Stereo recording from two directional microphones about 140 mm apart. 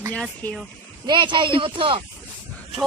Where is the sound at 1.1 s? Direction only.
35° right (ahead or behind).